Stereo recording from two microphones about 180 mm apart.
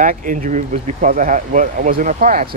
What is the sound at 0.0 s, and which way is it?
Speech, 45° right (ahead or behind).